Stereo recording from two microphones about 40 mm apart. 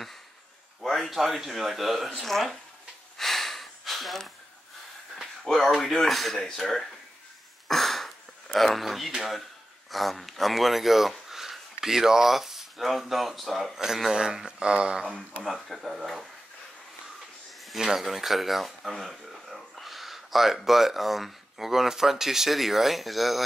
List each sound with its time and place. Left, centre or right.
1.1 s speech: centre
3.2 s a sound: centre
5.1 s speech: centre
7.6 s a sound: centre
8.5 s speech: centre; by 15.0 s right
15.5 s speech: centre
17.6 s speech: centre